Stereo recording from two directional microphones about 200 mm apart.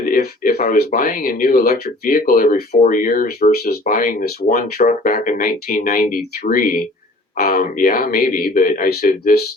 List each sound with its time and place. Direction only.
0.0 s speech: 45° left (ahead or behind)
4.8 s speech: 40° left (ahead or behind)